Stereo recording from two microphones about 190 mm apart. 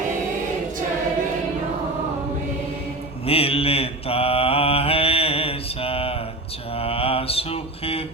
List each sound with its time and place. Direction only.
3.2 s mantra: 30° left (ahead or behind)